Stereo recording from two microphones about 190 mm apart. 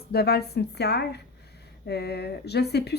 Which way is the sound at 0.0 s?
55° left (ahead or behind).